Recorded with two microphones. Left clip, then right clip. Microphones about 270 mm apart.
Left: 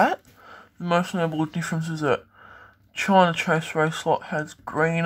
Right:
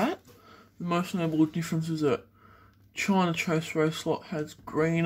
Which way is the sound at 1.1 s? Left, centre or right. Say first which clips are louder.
Left 1 dB; left.